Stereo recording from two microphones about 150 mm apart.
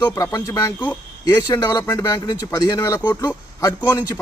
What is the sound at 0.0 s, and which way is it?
A man's voice, 20° left (ahead or behind).